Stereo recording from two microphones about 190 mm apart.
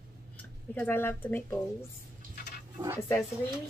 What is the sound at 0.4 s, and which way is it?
Speech, 10° left (ahead or behind).